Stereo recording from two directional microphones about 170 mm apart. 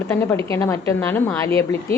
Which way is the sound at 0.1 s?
15° left (ahead or behind).